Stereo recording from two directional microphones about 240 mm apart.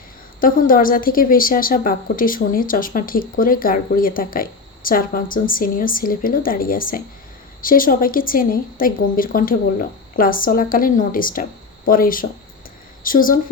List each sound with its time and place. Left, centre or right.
0.3 s a woman's voice: left